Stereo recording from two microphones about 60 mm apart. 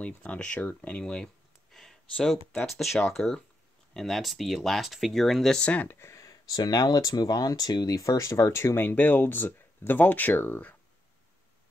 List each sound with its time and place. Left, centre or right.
0.0 s speech: left
0.7 s a sound: centre
2.6 s speech: centre
5.6 s speech: left
5.9 s a sound: left
6.2 s speech: left
8.7 s speech: left